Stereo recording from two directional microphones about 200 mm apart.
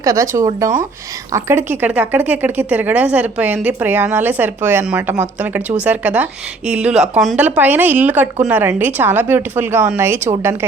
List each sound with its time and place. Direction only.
0.0 s speech: 15° right (ahead or behind)